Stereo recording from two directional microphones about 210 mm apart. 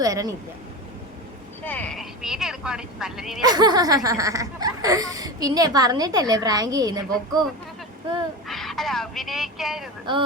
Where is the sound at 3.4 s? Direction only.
20° right (ahead or behind).